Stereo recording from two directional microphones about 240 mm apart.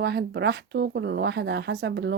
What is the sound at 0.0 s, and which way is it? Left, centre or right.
Speech, right.